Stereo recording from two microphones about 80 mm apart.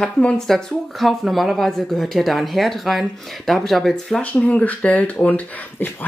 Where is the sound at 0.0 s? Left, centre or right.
Centre.